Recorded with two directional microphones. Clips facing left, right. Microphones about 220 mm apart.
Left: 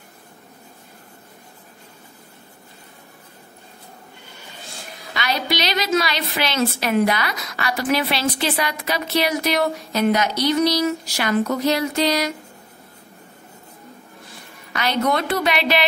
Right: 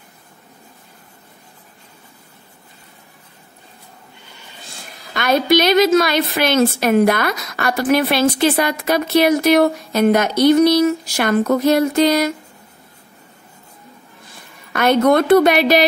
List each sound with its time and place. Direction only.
5.1 s a woman's voice: 50° right (ahead or behind)
14.7 s a woman's voice: 50° right (ahead or behind)